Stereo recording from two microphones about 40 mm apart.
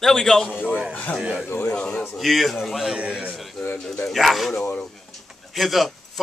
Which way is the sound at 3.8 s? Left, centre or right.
Centre.